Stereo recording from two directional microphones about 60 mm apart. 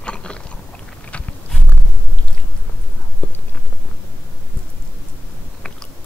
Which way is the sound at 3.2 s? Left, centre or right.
Left.